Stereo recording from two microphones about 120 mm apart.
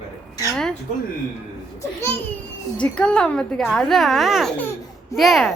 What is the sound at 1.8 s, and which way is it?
A child's voice, 20° left (ahead or behind).